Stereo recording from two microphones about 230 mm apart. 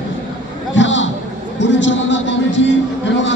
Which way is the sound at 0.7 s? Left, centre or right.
Left.